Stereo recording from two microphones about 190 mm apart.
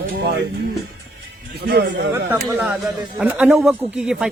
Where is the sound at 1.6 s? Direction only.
60° right (ahead or behind).